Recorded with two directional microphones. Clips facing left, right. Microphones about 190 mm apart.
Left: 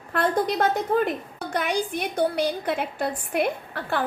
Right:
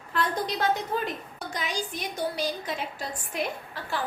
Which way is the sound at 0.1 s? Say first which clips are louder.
Left 6 dB; 55° left (ahead or behind).